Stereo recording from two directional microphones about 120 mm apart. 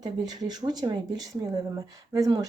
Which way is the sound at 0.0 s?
35° right (ahead or behind).